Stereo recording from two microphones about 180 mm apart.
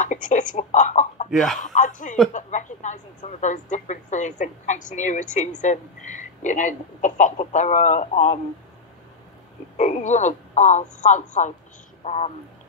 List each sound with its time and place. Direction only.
0.0 s speech: 45° left (ahead or behind)
1.3 s speech: centre (ahead or behind)
1.6 s speech: 45° left (ahead or behind)
9.8 s speech: 40° left (ahead or behind)